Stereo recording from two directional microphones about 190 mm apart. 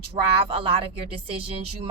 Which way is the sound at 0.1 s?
30° right (ahead or behind).